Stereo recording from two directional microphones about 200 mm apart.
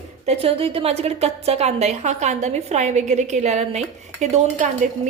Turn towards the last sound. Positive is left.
turn(degrees=-35)  # may be behind; listen again after turning